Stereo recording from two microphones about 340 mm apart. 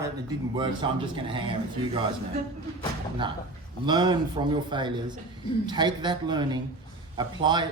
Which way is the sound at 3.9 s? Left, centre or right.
Centre.